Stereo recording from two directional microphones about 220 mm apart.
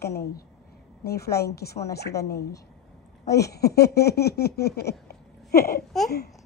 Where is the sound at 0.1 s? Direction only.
45° left (ahead or behind).